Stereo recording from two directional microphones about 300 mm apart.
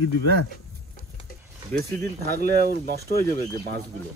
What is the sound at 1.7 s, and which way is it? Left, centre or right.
Speech, right.